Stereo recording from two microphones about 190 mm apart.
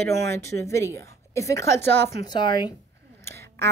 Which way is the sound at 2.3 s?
25° left (ahead or behind).